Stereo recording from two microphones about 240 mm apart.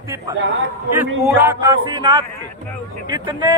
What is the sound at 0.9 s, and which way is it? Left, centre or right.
A man's voice, centre.